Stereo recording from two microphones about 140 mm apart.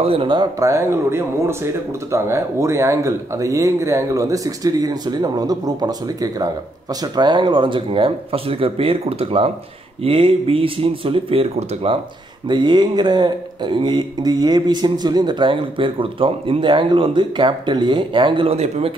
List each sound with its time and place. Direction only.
0.0 s speech: 40° right (ahead or behind)
12.4 s speech: 30° right (ahead or behind)